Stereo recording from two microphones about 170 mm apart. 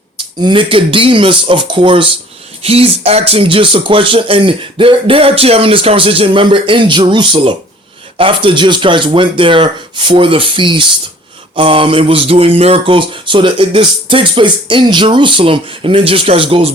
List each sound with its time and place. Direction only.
0.3 s speech: 30° right (ahead or behind)
2.6 s mantra: 35° right (ahead or behind)
8.2 s speech: 30° right (ahead or behind)
11.5 s mantra: 30° right (ahead or behind)